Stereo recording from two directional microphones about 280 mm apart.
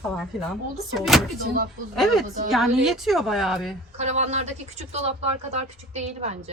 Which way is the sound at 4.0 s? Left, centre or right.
Right.